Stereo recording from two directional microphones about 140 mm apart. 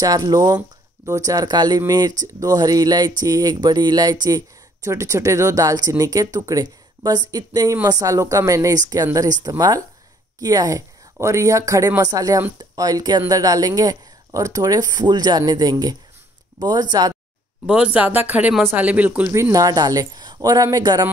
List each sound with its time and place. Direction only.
0.0 s a woman's voice: 25° right (ahead or behind)
17.6 s speech: 5° right (ahead or behind)
19.5 s speech: 25° right (ahead or behind)